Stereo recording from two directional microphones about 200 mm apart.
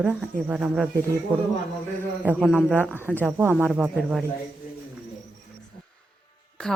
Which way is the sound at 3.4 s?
10° right (ahead or behind).